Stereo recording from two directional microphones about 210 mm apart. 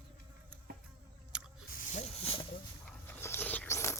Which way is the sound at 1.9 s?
30° left (ahead or behind).